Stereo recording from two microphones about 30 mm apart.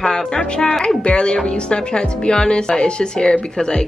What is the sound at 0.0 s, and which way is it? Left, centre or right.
A woman's voice, left.